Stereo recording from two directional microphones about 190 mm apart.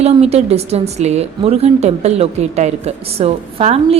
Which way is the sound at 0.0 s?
35° right (ahead or behind).